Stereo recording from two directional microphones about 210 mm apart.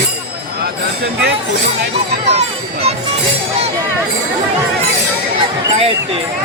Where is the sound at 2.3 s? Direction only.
30° right (ahead or behind).